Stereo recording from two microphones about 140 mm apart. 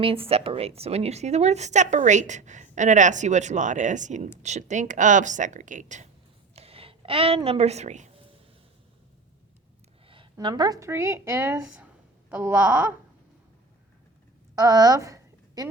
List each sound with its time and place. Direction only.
0.0 s a woman's voice: 40° right (ahead or behind); by 6.1 s 60° right (ahead or behind)
6.6 s a woman's voice: 45° right (ahead or behind)
10.3 s a woman's voice: 30° right (ahead or behind)
14.5 s a sound: 25° right (ahead or behind)